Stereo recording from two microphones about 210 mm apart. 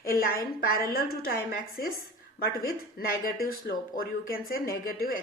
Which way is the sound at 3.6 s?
45° left (ahead or behind).